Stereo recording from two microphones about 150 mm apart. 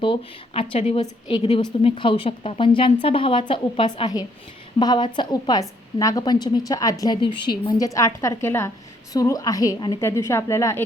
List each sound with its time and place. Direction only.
0.0 s a woman's voice: 35° left (ahead or behind); by 10.8 s 20° left (ahead or behind)